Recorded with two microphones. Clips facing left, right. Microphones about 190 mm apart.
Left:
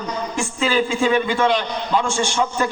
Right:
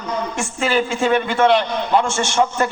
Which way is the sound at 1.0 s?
65° right (ahead or behind).